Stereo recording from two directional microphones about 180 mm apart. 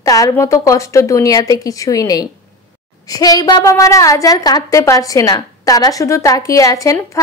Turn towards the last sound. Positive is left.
turn(degrees=20)  # may be behind; listen again after turning